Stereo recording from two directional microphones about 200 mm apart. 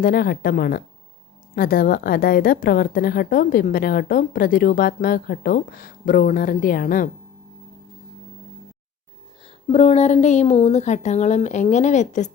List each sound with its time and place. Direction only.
0.0 s a woman's voice: 50° left (ahead or behind)
9.4 s a woman's voice: 30° left (ahead or behind)